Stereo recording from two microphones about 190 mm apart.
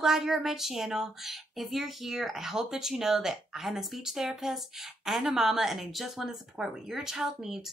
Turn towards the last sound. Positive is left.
turn(degrees=0)  # may be behind; listen again after turning